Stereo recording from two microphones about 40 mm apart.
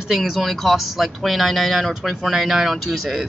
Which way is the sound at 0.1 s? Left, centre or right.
Centre.